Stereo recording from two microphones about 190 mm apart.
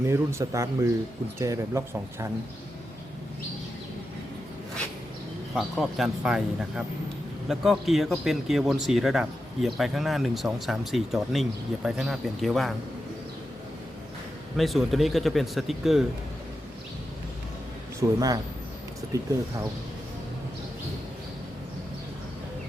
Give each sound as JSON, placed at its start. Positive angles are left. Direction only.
{"t": 0.0, "sound": "speech", "side_deg": -15}
{"t": 5.5, "sound": "a man's voice", "side_deg": 0}
{"t": 14.5, "sound": "a man's voice", "side_deg": 0}
{"t": 18.0, "sound": "speech", "side_deg": -15}